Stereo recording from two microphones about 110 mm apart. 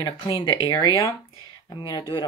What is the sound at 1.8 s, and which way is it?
Speech, 45° left (ahead or behind).